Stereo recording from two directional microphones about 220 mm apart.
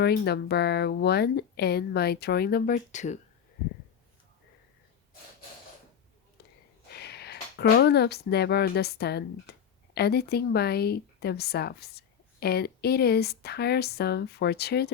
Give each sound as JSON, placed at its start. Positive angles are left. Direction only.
{"t": 0.0, "sound": "speech", "side_deg": 45}
{"t": 6.9, "sound": "speech", "side_deg": 45}